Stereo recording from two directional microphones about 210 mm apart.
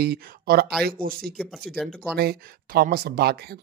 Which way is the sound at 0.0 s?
45° right (ahead or behind).